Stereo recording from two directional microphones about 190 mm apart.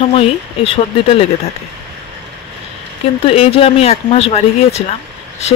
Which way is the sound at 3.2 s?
30° left (ahead or behind).